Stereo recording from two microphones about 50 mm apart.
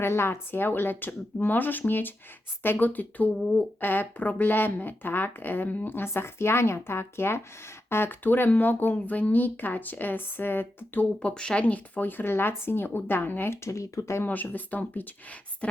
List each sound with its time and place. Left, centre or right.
0.0 s speech: left
11.2 s speech: centre
11.6 s speech: left
13.5 s speech: left
14.3 s speech: left